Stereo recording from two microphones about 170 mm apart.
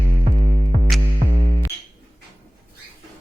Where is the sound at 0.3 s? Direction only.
45° right (ahead or behind).